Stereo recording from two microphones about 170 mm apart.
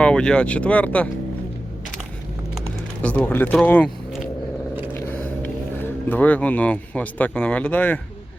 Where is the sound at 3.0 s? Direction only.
10° left (ahead or behind).